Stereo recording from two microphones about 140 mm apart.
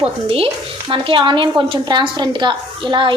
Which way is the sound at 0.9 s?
40° right (ahead or behind).